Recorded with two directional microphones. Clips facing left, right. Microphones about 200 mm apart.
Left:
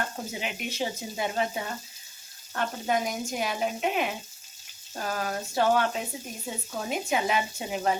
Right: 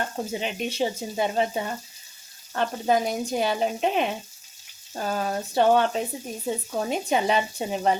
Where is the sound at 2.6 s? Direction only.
30° right (ahead or behind).